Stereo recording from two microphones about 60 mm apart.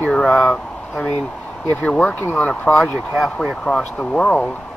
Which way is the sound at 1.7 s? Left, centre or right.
Left.